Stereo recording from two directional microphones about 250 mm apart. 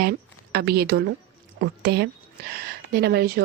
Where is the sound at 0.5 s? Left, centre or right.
Right.